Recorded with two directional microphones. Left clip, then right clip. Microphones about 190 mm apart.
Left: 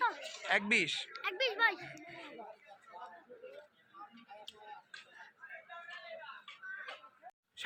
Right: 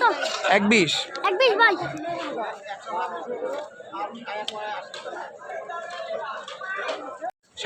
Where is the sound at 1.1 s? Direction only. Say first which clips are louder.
Right 17 dB; 30° right (ahead or behind).